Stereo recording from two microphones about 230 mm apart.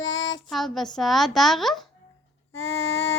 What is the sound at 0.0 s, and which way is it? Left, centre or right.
Child singing, left.